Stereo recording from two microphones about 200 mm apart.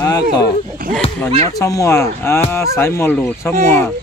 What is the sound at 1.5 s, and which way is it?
Speech, 15° left (ahead or behind).